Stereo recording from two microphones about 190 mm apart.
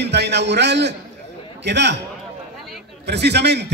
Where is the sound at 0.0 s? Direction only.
60° right (ahead or behind).